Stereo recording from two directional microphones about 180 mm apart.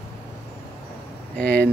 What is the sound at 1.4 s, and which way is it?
Speech, 60° right (ahead or behind).